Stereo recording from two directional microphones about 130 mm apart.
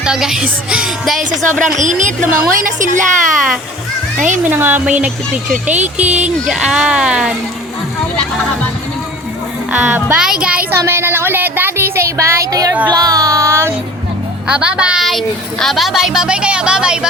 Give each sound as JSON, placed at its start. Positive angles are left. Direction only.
{"t": 0.0, "sound": "speech", "side_deg": -5}
{"t": 1.8, "sound": "a woman's voice", "side_deg": -70}
{"t": 2.6, "sound": "a child's voice", "side_deg": -85}
{"t": 4.4, "sound": "speech", "side_deg": -15}
{"t": 5.7, "sound": "speech", "side_deg": -60}
{"t": 6.4, "sound": "speech", "side_deg": -5}
{"t": 9.7, "sound": "speech", "side_deg": -10}
{"t": 10.7, "sound": "speech", "side_deg": -20}
{"t": 14.4, "sound": "speech", "side_deg": -10}